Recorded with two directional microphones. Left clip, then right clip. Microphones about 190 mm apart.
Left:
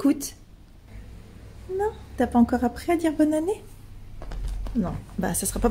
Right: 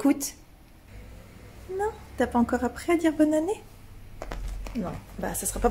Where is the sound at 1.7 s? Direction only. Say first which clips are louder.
Left 2 dB; 15° left (ahead or behind).